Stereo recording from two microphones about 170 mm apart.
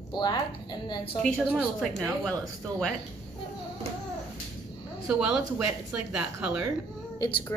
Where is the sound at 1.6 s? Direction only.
Centre (ahead or behind).